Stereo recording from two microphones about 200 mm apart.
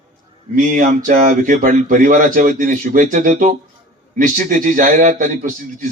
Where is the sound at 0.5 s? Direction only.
40° right (ahead or behind).